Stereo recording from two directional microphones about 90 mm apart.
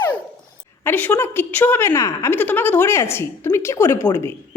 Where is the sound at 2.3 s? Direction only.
20° left (ahead or behind).